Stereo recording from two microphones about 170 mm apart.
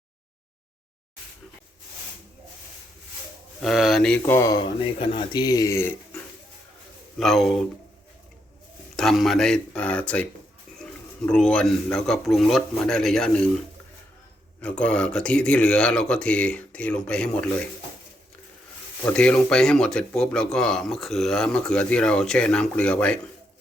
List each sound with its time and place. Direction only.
3.6 s speech: centre (ahead or behind); by 4.7 s 20° left (ahead or behind)
4.8 s speech: 30° left (ahead or behind); by 6.2 s 15° left (ahead or behind)
7.2 s speech: centre (ahead or behind)
9.0 s speech: centre (ahead or behind)
11.3 s speech: 5° left (ahead or behind)
14.6 s speech: 5° left (ahead or behind)
19.0 s speech: 5° left (ahead or behind)